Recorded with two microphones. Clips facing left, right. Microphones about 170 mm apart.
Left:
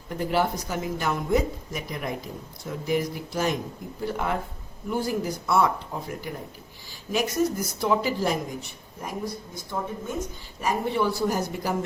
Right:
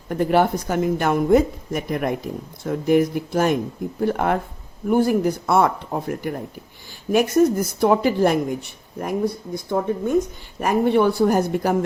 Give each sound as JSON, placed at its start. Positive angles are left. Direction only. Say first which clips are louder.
{"t": 0.1, "sound": "a woman's voice", "louder": "right 7 dB", "side_deg": -55}